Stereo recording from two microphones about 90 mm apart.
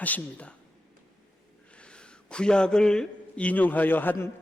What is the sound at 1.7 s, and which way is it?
A man's voice, 10° left (ahead or behind).